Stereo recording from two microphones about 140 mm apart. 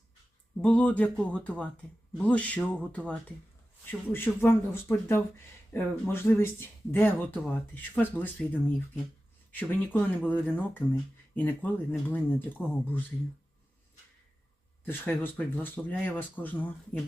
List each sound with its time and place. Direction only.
0.6 s speech: 10° left (ahead or behind)
9.5 s speech: 10° left (ahead or behind)
14.8 s speech: 15° left (ahead or behind)